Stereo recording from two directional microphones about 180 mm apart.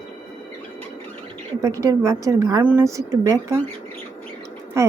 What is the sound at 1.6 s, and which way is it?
A woman's voice, 20° right (ahead or behind).